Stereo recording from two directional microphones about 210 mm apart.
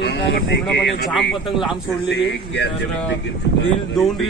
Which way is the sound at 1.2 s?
Centre (ahead or behind).